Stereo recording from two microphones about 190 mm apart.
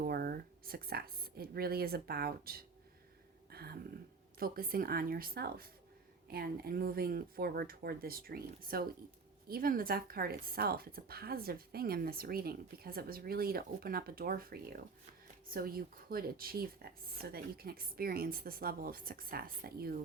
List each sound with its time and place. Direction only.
0.0 s speech: 55° right (ahead or behind)